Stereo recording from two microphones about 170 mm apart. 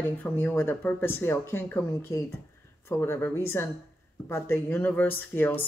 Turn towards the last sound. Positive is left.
turn(degrees=10)  # may be behind; listen again after turning